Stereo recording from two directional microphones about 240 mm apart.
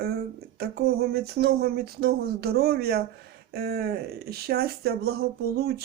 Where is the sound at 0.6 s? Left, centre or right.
Right.